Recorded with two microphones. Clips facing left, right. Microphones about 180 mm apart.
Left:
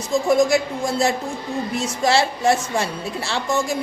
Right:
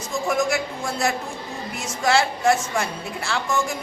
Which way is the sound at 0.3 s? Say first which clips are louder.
Left 5 dB; 30° left (ahead or behind).